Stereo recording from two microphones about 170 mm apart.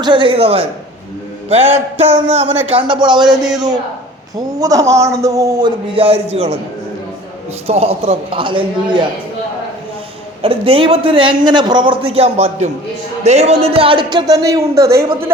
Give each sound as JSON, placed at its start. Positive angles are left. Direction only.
{"t": 0.0, "sound": "a man's voice", "side_deg": -30}
{"t": 7.7, "sound": "a man's voice", "side_deg": -35}
{"t": 10.4, "sound": "a man's voice", "side_deg": -35}